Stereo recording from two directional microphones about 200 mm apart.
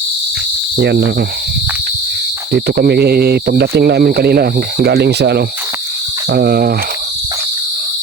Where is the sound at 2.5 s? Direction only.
55° right (ahead or behind).